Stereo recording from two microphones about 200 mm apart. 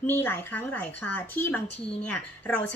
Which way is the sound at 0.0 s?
10° left (ahead or behind).